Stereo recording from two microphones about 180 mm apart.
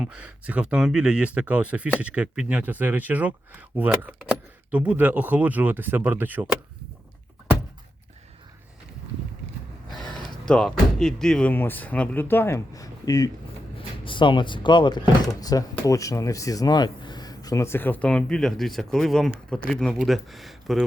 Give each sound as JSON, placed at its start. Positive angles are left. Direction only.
{"t": 0.0, "sound": "speech", "side_deg": -5}
{"t": 9.9, "sound": "speech", "side_deg": 0}